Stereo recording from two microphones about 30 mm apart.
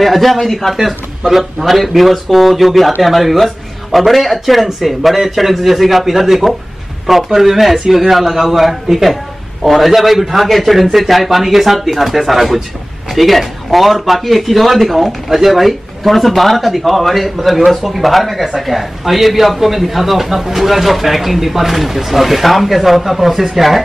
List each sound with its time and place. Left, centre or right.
0.0 s speech: centre
0.7 s speech: centre
8.9 s a sound: centre
9.7 s speech: centre